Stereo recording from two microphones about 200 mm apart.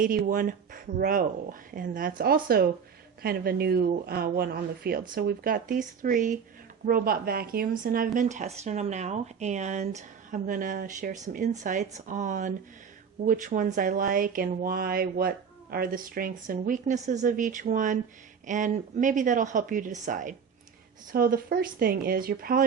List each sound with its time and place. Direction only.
0.0 s a woman's voice: 45° right (ahead or behind)